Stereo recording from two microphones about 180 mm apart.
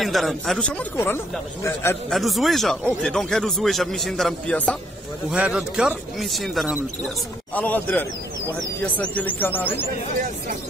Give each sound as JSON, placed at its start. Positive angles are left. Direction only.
{"t": 0.0, "sound": "speech", "side_deg": 0}
{"t": 2.0, "sound": "a man's voice", "side_deg": 0}
{"t": 5.3, "sound": "a man's voice", "side_deg": -5}